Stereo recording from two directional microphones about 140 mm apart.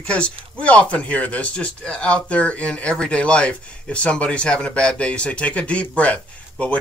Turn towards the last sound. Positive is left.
turn(degrees=10)  # may be behind; listen again after turning